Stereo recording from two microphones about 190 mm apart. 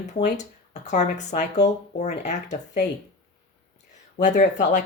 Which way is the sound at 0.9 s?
40° left (ahead or behind).